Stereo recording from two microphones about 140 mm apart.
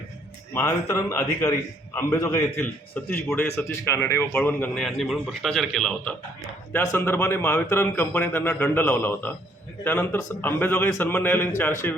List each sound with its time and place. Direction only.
0.5 s a man's voice: 20° left (ahead or behind); by 6.1 s 5° left (ahead or behind)
6.9 s a man's voice: 15° left (ahead or behind)